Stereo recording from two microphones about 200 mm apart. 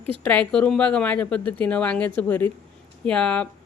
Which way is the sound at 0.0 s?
30° right (ahead or behind).